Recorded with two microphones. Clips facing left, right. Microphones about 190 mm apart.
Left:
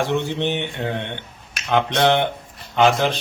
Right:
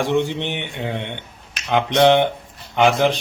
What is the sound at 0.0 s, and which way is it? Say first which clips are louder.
A man's voice: right 1 dB; 15° right (ahead or behind).